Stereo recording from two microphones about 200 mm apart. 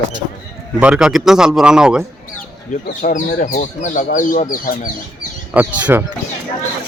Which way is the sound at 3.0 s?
40° left (ahead or behind).